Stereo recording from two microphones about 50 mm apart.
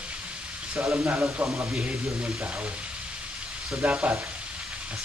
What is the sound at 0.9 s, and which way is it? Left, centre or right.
Speech, right.